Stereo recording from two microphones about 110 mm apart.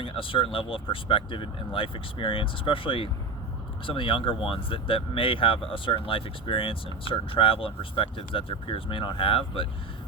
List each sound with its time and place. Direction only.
0.0 s speech: 55° left (ahead or behind)